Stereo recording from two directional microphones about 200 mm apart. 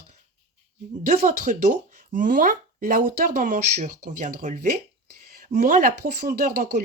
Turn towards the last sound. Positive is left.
turn(degrees=-40)  # may be behind; listen again after turning